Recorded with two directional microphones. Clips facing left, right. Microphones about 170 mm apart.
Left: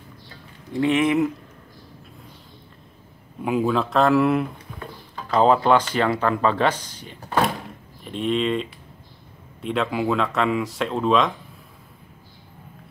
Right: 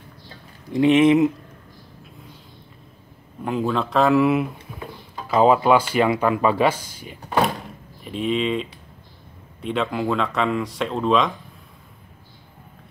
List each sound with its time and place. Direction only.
0.7 s speech: 20° right (ahead or behind)
3.4 s speech: 5° left (ahead or behind)